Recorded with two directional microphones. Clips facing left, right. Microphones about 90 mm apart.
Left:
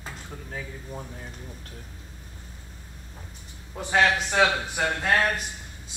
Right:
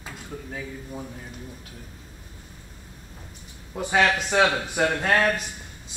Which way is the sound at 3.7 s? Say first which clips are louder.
Right 1 dB; 15° right (ahead or behind).